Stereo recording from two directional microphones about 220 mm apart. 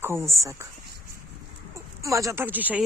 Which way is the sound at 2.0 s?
15° right (ahead or behind).